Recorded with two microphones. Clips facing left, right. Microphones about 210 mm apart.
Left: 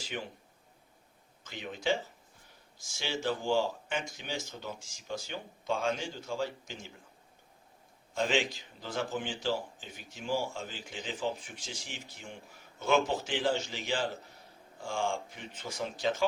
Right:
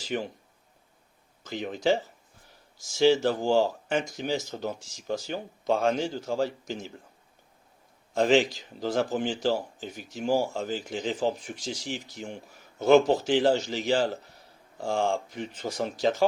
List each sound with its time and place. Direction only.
0.1 s speech: 45° right (ahead or behind)
1.5 s speech: 40° right (ahead or behind)
8.2 s speech: 40° right (ahead or behind)